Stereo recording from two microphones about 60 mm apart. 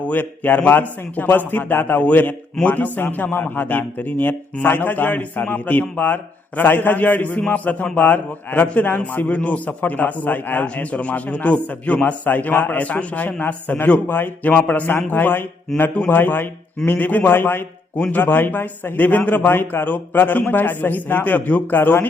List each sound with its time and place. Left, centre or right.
0.0 s a man's voice: left